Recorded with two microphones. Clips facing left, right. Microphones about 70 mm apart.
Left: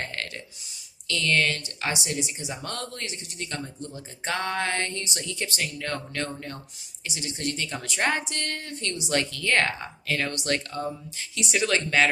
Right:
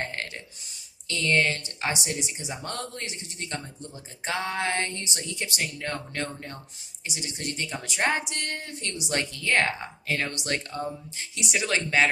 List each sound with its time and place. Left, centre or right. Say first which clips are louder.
0.0 s a sound: right 1 dB; right
1.0 s speech: even; right
4.2 s speech: left 1 dB; centre
9.4 s speech: right 1 dB; centre
10.1 s speech: left 2 dB; right